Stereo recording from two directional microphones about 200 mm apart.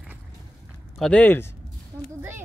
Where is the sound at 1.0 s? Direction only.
5° left (ahead or behind).